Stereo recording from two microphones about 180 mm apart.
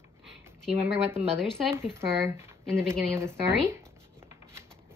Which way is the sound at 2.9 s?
15° right (ahead or behind).